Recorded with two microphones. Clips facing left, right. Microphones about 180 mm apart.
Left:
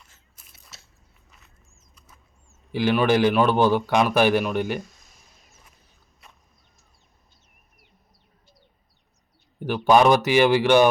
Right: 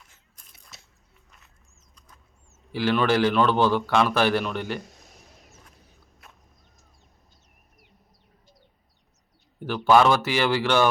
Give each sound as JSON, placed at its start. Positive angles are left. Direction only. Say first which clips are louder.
{"t": 0.4, "sound": "biting", "louder": "left 1 dB", "side_deg": 5}
{"t": 2.7, "sound": "a man's voice", "louder": "left 2 dB", "side_deg": 15}
{"t": 4.8, "sound": "a sound", "louder": "left 3 dB", "side_deg": -65}
{"t": 6.2, "sound": "whip", "louder": "even", "side_deg": 0}
{"t": 9.6, "sound": "a man's voice", "louder": "left 1 dB", "side_deg": 15}